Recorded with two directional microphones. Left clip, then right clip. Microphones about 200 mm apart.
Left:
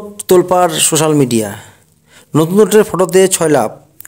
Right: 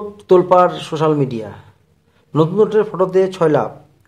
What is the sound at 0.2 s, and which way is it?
A man's voice, 45° left (ahead or behind).